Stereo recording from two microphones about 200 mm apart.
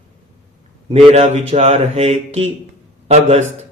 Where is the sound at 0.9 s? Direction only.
30° right (ahead or behind).